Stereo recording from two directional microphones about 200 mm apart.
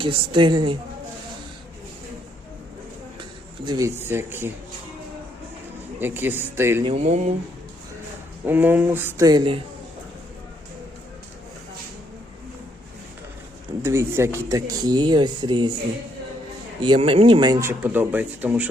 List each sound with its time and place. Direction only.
0.0 s speech: 25° right (ahead or behind)
3.7 s speech: 15° right (ahead or behind)
6.0 s speech: 10° right (ahead or behind)
6.8 s speech: 30° right (ahead or behind)
8.4 s speech: 10° right (ahead or behind)
13.8 s speech: 15° right (ahead or behind)
16.8 s speech: 25° right (ahead or behind); by 18.7 s 5° right (ahead or behind)